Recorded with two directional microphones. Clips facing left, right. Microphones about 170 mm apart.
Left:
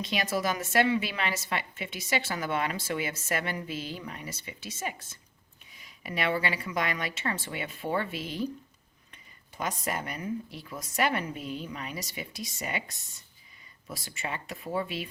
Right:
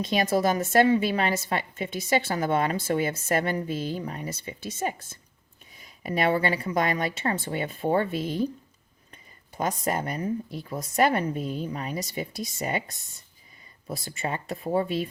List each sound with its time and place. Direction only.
0.0 s a woman's voice: 45° right (ahead or behind)
4.3 s a woman's voice: 50° right (ahead or behind)
5.8 s speech: 40° right (ahead or behind)
9.6 s speech: 40° right (ahead or behind)
13.8 s speech: 35° right (ahead or behind)